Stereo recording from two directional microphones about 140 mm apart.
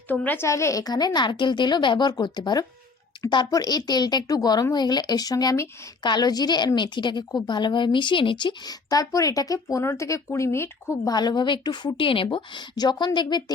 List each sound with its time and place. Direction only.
0.1 s speech: 10° left (ahead or behind)
11.1 s a woman's voice: 30° left (ahead or behind)